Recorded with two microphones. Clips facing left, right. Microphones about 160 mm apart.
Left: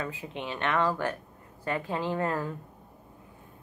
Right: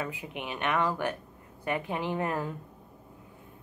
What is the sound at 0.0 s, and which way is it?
A woman's voice, 15° right (ahead or behind).